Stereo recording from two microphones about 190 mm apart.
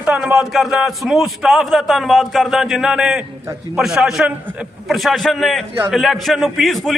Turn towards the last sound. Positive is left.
turn(degrees=0)  # may be behind; listen again after turning